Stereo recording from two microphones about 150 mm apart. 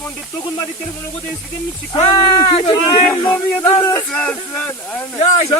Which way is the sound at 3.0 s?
15° left (ahead or behind).